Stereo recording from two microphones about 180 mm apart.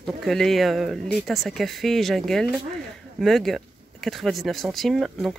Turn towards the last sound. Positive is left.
turn(degrees=0)  # may be behind; listen again after turning